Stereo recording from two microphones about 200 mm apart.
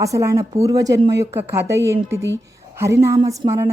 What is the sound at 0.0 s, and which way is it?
A woman's voice, 15° right (ahead or behind).